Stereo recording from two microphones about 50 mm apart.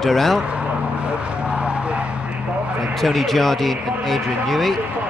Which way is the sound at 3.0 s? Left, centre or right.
Centre.